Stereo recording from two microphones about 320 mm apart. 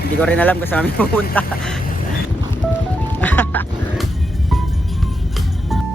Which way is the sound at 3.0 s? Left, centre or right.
Centre.